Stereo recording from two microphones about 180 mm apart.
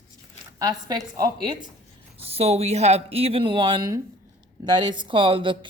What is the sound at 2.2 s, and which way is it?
A woman's voice, 35° right (ahead or behind).